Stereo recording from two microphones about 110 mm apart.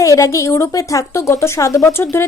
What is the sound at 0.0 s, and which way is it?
A woman's voice, 30° left (ahead or behind).